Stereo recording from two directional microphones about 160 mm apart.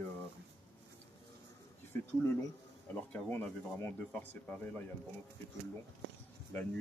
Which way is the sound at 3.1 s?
10° left (ahead or behind).